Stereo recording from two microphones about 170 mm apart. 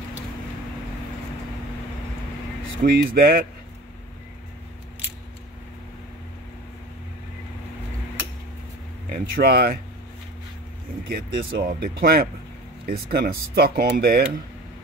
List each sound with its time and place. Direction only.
2.8 s speech: 65° right (ahead or behind)
9.1 s speech: 60° right (ahead or behind)
11.1 s speech: 60° right (ahead or behind)